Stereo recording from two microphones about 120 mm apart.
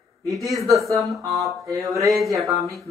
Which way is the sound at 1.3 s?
Centre (ahead or behind).